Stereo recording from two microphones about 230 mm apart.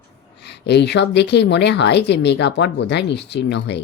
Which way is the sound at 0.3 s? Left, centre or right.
Left.